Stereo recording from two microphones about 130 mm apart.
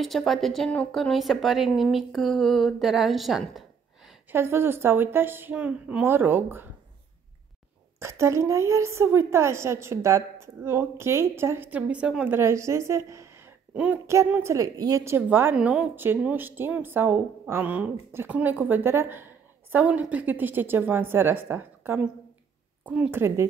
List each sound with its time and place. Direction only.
0.0 s speech: centre (ahead or behind)
4.3 s a woman's voice: 15° right (ahead or behind)
8.0 s a woman's voice: 20° right (ahead or behind)
12.4 s a woman's voice: 20° right (ahead or behind)